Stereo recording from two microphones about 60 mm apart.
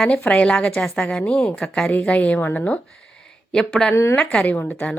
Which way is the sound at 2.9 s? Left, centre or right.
Centre.